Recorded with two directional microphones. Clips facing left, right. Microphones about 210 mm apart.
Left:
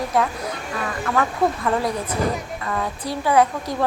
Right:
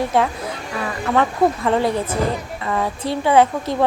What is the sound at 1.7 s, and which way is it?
Speech, 25° right (ahead or behind).